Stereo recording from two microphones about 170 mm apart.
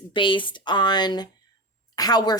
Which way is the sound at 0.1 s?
30° left (ahead or behind).